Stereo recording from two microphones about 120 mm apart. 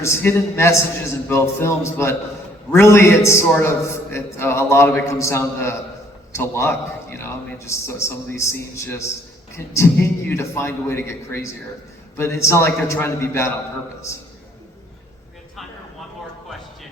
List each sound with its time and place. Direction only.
0.0 s a man's voice: 20° left (ahead or behind)